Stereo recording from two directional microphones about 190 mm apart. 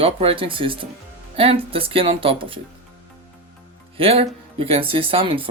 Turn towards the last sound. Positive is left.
turn(degrees=-30)  # may be behind; listen again after turning